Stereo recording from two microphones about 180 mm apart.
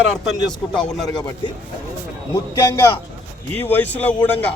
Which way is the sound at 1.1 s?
25° left (ahead or behind).